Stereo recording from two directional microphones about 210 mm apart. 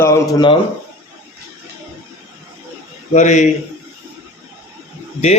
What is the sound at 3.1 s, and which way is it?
Speech, 35° left (ahead or behind).